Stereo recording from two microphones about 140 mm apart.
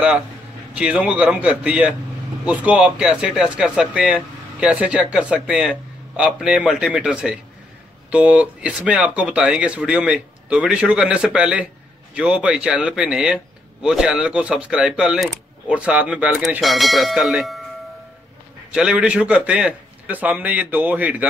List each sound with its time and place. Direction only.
0.7 s speech: 10° right (ahead or behind)
18.7 s speech: 5° right (ahead or behind)